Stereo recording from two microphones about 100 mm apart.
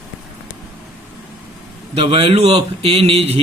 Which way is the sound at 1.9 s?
70° right (ahead or behind).